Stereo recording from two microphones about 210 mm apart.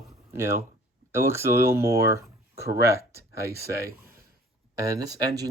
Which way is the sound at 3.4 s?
45° right (ahead or behind).